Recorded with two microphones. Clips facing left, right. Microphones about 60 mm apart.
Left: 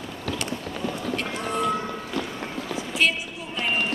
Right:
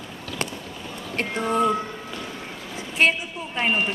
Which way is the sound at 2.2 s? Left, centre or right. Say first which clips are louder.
Left 7 dB; left.